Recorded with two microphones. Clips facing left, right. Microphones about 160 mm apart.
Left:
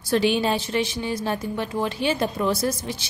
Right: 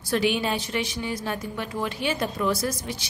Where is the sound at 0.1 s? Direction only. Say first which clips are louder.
Left 3 dB; 30° left (ahead or behind).